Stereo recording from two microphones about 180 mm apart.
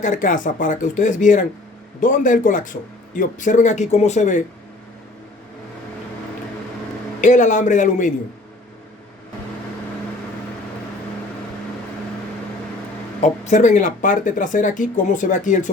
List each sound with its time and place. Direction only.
0.0 s speech: 45° left (ahead or behind)
7.2 s speech: 45° left (ahead or behind)
13.2 s speech: 45° left (ahead or behind)